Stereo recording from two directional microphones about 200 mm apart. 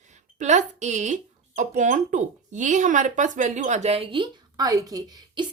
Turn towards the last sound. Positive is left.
turn(degrees=-20)  # may be behind; listen again after turning